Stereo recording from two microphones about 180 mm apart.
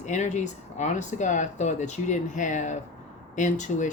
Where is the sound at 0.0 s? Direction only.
40° left (ahead or behind).